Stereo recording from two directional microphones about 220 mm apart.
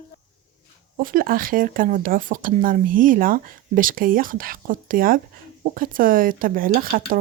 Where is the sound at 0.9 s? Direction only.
40° right (ahead or behind).